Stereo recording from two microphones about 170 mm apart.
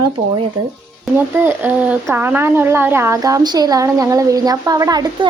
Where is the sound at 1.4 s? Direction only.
10° right (ahead or behind).